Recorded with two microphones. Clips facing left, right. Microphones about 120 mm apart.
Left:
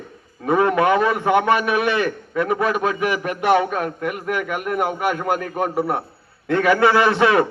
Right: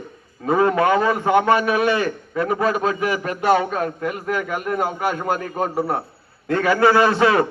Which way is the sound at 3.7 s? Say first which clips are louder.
Even; 25° right (ahead or behind).